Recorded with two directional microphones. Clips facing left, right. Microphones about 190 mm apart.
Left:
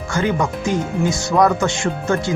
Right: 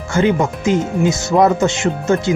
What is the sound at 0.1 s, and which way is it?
Speech, 25° right (ahead or behind).